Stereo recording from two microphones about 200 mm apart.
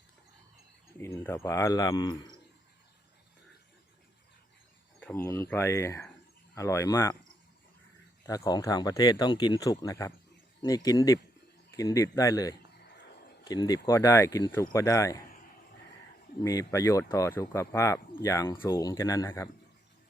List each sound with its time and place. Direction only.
0.9 s speech: 10° left (ahead or behind)
4.9 s speech: 10° left (ahead or behind)
8.3 s speech: 20° left (ahead or behind)
16.4 s speech: 15° left (ahead or behind)